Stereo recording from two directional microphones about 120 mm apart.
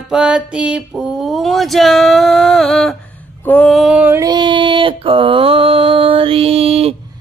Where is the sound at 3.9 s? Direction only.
15° right (ahead or behind).